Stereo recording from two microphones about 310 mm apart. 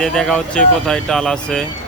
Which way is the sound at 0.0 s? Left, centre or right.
Centre.